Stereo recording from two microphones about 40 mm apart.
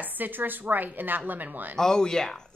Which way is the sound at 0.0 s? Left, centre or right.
Right.